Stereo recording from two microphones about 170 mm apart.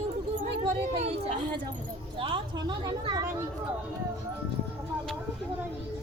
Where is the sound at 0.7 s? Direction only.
35° right (ahead or behind).